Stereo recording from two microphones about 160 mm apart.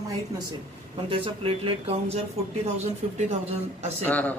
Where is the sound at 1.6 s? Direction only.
40° right (ahead or behind).